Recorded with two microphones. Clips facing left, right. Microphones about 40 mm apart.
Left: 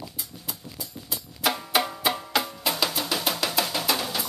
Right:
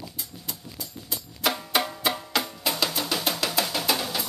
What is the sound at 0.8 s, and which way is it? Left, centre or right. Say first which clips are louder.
Music: even; centre.